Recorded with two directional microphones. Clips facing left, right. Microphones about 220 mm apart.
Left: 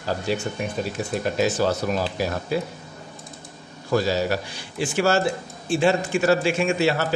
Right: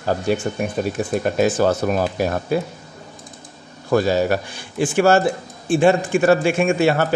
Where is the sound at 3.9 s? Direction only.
55° right (ahead or behind).